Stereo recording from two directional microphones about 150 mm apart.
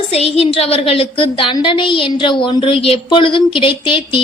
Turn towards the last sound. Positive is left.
turn(degrees=35)  # may be behind; listen again after turning